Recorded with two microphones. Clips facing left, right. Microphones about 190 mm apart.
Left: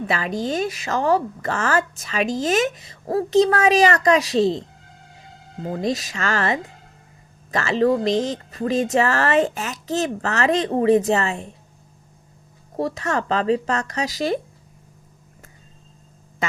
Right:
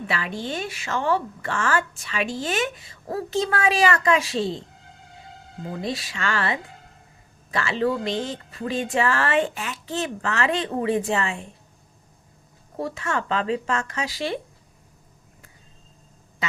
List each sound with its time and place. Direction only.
0.1 s a woman's voice: 40° left (ahead or behind)
5.6 s a woman's voice: 40° left (ahead or behind)
12.7 s a woman's voice: 40° left (ahead or behind)
16.4 s a sound: 50° left (ahead or behind)